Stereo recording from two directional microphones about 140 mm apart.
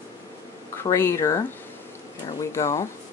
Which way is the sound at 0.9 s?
20° left (ahead or behind).